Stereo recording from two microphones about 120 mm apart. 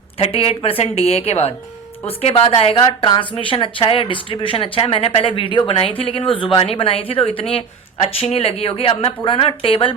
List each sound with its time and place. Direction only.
0.2 s a woman's voice: 55° left (ahead or behind)
2.7 s speech: 45° left (ahead or behind)